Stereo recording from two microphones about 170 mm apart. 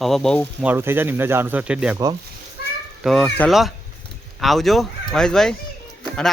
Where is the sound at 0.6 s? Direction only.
10° right (ahead or behind).